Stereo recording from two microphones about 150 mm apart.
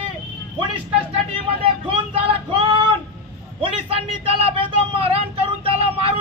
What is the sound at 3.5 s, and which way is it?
A man's voice, 40° right (ahead or behind).